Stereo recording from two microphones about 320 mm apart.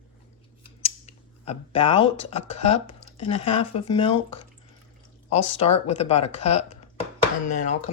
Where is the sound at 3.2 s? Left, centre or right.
Centre.